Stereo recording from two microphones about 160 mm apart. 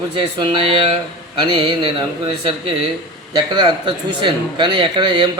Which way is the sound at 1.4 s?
30° right (ahead or behind).